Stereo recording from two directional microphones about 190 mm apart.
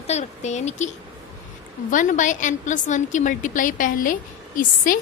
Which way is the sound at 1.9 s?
40° left (ahead or behind).